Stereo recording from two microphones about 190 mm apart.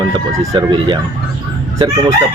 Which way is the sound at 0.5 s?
25° right (ahead or behind).